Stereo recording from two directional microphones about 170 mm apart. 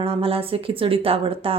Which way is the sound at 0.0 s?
35° right (ahead or behind).